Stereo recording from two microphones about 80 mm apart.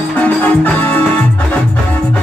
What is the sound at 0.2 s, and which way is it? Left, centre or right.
Music, centre.